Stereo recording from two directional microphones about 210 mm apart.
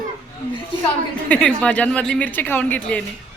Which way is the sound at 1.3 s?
5° left (ahead or behind).